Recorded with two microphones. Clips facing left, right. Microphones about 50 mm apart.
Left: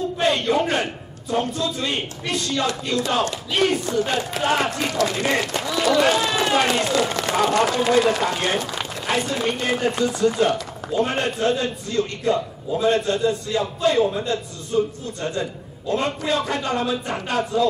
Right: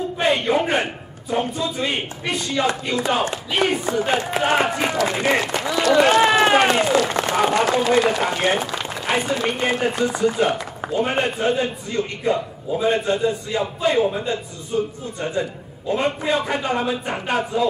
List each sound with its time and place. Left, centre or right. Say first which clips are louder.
0.2 s a sound: right 1 dB; centre
1.3 s speech: even; centre
6.0 s a man's voice: right 5 dB; right; by 14.4 s centre
15.9 s speech: right 2 dB; centre